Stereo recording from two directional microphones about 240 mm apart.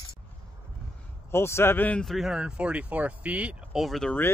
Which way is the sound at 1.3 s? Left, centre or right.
Centre.